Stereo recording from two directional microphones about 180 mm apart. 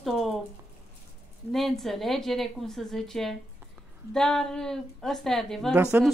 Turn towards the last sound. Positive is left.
turn(degrees=-5)  # may be behind; listen again after turning